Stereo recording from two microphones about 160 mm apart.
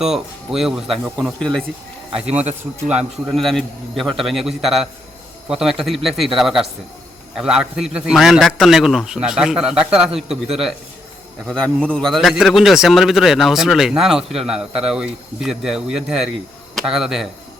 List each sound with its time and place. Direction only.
0.0 s speech: centre (ahead or behind)
2.8 s speech: 5° right (ahead or behind)
11.4 s speech: 5° left (ahead or behind)